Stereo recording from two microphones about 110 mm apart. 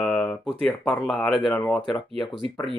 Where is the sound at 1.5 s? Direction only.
10° left (ahead or behind).